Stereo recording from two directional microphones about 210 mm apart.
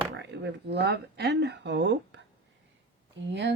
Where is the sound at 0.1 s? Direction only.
55° right (ahead or behind).